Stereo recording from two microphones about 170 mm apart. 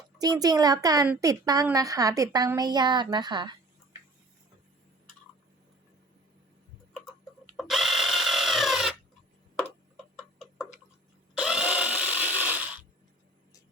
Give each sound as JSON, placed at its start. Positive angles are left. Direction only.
{"t": 0.2, "sound": "a woman's voice", "side_deg": -20}
{"t": 7.5, "sound": "tools", "side_deg": 0}
{"t": 10.2, "sound": "tick-tock", "side_deg": 5}
{"t": 11.3, "sound": "tools", "side_deg": -5}